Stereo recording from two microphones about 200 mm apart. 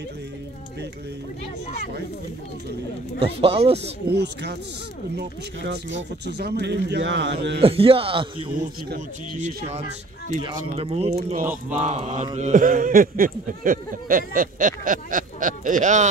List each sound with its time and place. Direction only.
3.2 s speech: 30° right (ahead or behind)
4.1 s a man's voice: 55° right (ahead or behind)
5.7 s a man's voice: 60° right (ahead or behind)
7.6 s speech: 30° right (ahead or behind)
9.4 s speech: 50° right (ahead or behind)
10.4 s speech: 25° right (ahead or behind)